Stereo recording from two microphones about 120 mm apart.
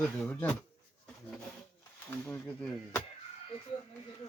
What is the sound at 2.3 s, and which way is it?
Speech, 10° left (ahead or behind).